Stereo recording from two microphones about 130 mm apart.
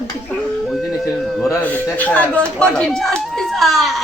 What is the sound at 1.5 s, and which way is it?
A woman's voice, 10° left (ahead or behind).